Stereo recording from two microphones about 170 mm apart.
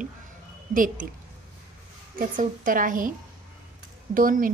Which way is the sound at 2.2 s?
50° right (ahead or behind).